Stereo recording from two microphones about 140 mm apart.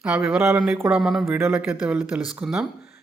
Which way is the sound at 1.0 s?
5° right (ahead or behind).